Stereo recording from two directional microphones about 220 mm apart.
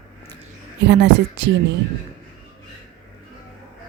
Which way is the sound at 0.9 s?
50° right (ahead or behind).